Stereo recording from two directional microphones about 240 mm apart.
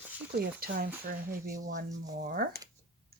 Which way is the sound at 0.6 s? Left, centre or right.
Right.